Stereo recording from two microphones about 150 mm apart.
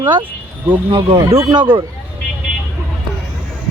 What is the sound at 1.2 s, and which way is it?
Speech, 20° right (ahead or behind).